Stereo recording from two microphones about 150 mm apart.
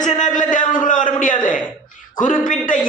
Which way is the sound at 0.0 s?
60° left (ahead or behind).